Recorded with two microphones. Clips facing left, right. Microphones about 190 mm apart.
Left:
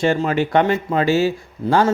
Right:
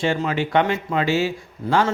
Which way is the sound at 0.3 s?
45° left (ahead or behind).